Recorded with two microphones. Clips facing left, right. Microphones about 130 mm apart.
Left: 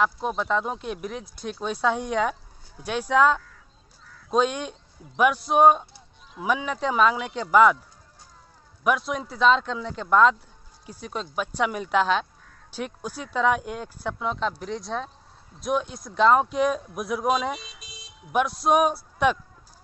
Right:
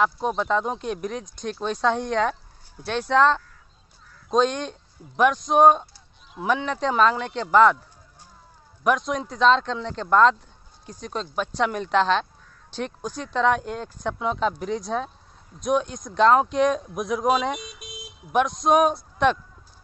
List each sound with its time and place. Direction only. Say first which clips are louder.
0.0 s speech: right 2 dB; centre (ahead or behind)
8.8 s speech: right 2 dB; 5° left (ahead or behind)
14.1 s speech: right 4 dB; 5° right (ahead or behind)
17.6 s speech: right 6 dB; 55° right (ahead or behind)
18.3 s speech: right 2 dB; 5° left (ahead or behind)